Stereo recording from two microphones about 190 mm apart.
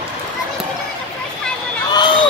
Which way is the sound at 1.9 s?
25° left (ahead or behind).